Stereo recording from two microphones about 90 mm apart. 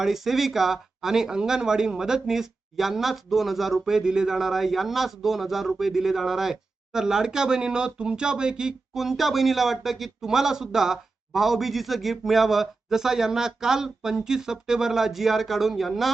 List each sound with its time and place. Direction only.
0.0 s speech: 5° right (ahead or behind)